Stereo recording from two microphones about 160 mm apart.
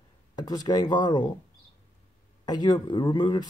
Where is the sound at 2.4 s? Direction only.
25° left (ahead or behind).